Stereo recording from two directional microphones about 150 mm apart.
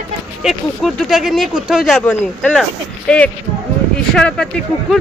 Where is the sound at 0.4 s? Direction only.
Centre (ahead or behind).